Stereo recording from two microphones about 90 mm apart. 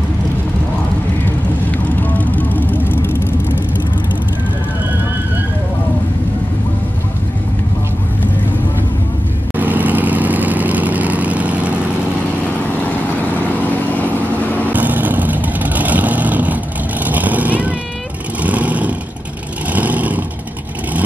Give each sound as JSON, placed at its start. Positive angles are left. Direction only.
{"t": 1.7, "sound": "vehicle", "side_deg": 20}
{"t": 9.6, "sound": "vehicle", "side_deg": -20}
{"t": 14.7, "sound": "vehicle", "side_deg": -20}